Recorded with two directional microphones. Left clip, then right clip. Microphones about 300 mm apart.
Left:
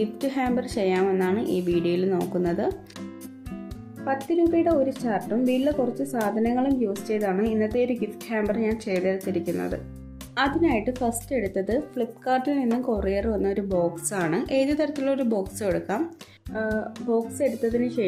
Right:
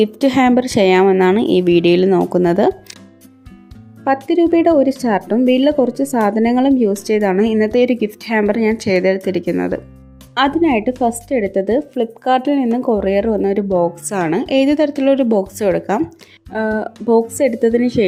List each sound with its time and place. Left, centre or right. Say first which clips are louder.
0.0 s a woman's voice: right 13 dB; right
4.0 s a woman's voice: right 9 dB; right